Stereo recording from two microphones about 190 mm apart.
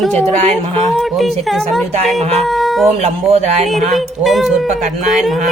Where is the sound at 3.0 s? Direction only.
35° right (ahead or behind).